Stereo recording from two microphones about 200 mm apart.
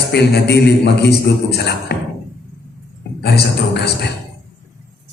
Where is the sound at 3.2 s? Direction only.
55° left (ahead or behind).